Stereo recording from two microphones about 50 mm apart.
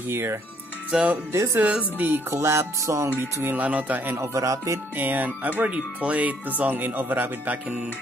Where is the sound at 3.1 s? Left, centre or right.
Right.